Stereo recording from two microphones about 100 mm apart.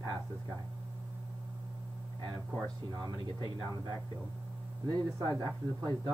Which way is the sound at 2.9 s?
40° right (ahead or behind).